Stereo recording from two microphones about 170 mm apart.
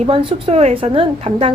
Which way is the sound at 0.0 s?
35° right (ahead or behind).